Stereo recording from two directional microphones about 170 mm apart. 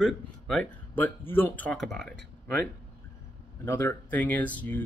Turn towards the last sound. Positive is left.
turn(degrees=10)  # may be behind; listen again after turning